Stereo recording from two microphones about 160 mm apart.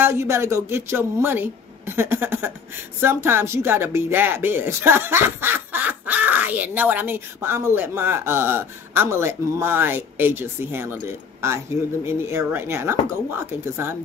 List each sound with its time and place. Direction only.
0.0 s speech: 15° right (ahead or behind)